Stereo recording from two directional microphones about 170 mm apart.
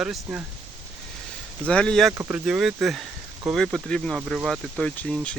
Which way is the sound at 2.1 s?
15° right (ahead or behind).